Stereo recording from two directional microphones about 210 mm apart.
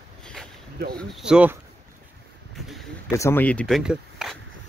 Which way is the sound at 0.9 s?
5° right (ahead or behind).